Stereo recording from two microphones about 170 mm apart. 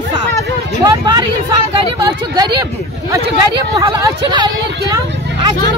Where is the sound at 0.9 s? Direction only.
25° right (ahead or behind).